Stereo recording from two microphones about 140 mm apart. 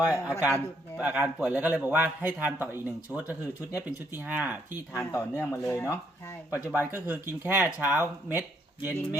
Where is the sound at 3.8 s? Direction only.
10° right (ahead or behind).